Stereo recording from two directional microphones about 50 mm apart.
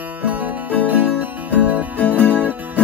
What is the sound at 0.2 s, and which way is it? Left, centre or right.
Music, right.